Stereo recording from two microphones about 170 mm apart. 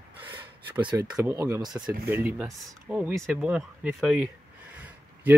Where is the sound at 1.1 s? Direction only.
10° right (ahead or behind).